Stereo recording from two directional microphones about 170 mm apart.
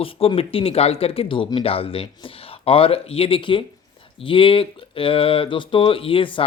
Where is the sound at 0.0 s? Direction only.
35° left (ahead or behind).